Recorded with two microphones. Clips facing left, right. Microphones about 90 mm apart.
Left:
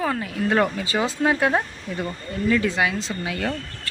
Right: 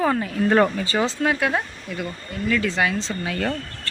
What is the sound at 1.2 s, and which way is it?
Speech, 25° left (ahead or behind).